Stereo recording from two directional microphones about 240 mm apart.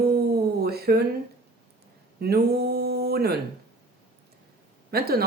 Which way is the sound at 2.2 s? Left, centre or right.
Right.